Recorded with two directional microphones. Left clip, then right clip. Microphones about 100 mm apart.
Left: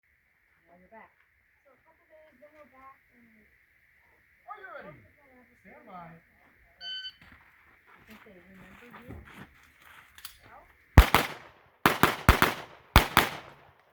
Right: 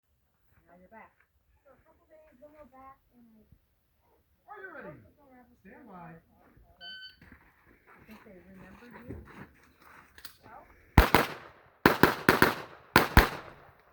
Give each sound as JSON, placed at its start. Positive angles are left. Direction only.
{"t": 4.6, "sound": "speech", "side_deg": 20}
{"t": 6.7, "sound": "beep", "side_deg": 25}
{"t": 7.9, "sound": "a sound", "side_deg": 15}
{"t": 11.4, "sound": "firecracker", "side_deg": 25}